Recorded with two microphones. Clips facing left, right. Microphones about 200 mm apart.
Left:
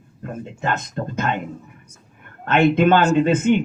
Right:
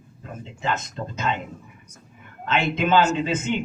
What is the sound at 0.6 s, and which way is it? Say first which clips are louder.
Speech: left 3 dB; 55° left (ahead or behind).